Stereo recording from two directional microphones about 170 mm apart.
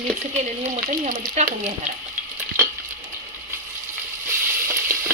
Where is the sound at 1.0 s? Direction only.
45° right (ahead or behind).